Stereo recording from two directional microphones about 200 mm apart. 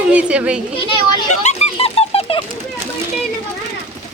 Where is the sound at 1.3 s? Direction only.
35° left (ahead or behind).